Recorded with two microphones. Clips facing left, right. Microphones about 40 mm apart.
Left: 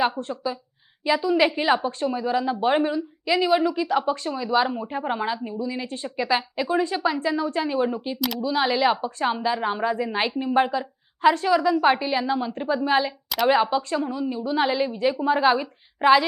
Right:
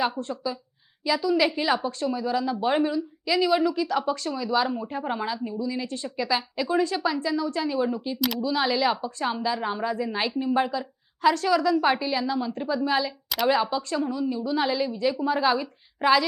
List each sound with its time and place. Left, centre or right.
0.2 s speech: left
9.8 s a woman's voice: left
10.1 s speech: left